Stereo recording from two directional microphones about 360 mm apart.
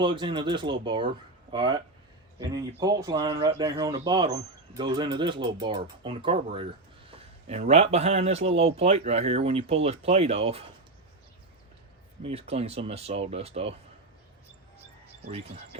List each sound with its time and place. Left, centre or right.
0.0 s speech: centre
2.8 s speech: centre
12.2 s speech: centre
15.3 s speech: centre